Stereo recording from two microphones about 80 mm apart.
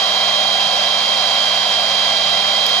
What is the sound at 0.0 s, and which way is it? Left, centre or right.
Hair dryer, centre.